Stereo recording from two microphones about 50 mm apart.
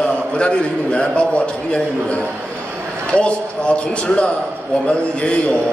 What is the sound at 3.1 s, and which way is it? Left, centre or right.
A man's voice, left.